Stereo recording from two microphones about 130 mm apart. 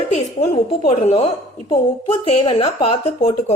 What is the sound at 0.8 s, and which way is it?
A woman's voice, 50° left (ahead or behind).